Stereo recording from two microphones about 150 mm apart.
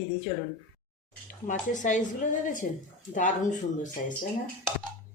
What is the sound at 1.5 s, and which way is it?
Speech, 55° left (ahead or behind).